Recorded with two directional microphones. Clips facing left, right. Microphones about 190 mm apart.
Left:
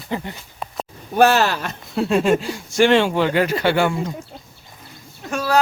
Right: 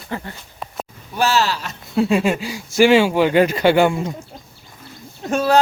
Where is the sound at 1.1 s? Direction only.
55° left (ahead or behind).